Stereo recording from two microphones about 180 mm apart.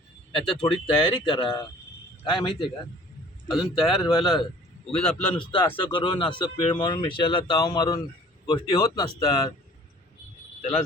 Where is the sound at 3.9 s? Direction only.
25° left (ahead or behind).